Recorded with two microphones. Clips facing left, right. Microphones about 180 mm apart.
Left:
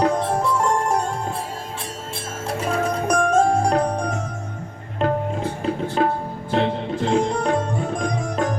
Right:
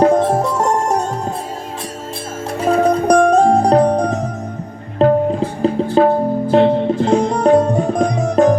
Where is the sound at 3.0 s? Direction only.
35° right (ahead or behind).